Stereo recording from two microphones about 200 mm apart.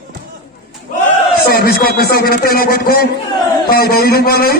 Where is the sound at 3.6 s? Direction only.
50° left (ahead or behind).